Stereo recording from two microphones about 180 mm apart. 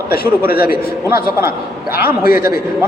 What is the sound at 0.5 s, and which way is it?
Speech, 55° left (ahead or behind).